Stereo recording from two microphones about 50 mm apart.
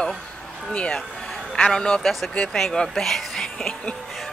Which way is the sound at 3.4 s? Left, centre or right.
Centre.